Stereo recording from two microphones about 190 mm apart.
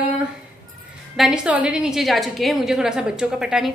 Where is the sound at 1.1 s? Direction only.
5° right (ahead or behind).